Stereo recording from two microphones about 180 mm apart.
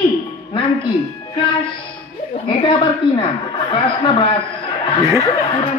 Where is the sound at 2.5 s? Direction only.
25° left (ahead or behind).